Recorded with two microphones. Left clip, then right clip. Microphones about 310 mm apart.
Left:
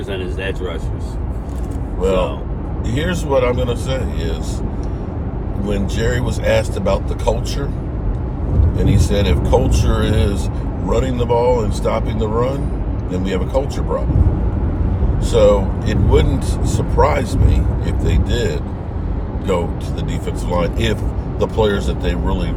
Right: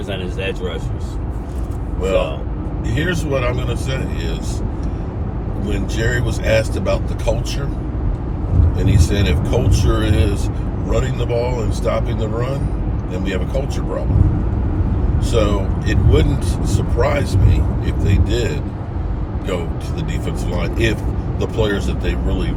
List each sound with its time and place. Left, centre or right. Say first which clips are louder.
2.9 s speech: left 3 dB; centre
5.6 s speech: left 2 dB; centre
8.8 s speech: left 3 dB; centre
15.3 s speech: left 7 dB; centre
20.2 s speech: left 7 dB; centre